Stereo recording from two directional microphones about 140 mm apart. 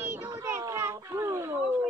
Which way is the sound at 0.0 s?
25° right (ahead or behind).